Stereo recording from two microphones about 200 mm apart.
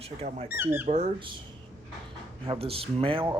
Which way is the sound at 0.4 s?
10° right (ahead or behind).